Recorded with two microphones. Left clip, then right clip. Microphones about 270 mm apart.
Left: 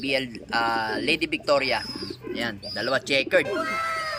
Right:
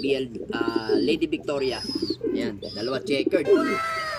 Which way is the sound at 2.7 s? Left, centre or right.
Centre.